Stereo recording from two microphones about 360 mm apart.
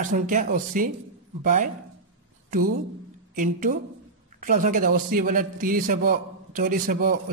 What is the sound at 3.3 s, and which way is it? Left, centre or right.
A man's voice, right.